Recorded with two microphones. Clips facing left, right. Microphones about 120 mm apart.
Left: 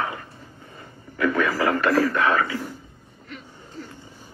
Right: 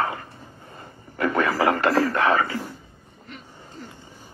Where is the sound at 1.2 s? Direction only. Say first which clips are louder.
Even; 35° right (ahead or behind).